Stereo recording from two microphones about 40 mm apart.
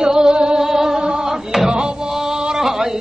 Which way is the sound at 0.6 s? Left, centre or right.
Centre.